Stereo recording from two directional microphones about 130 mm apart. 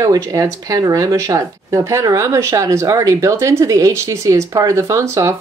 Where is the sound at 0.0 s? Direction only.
25° right (ahead or behind).